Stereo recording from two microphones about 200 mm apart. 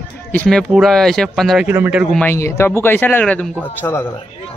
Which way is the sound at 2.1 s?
10° left (ahead or behind).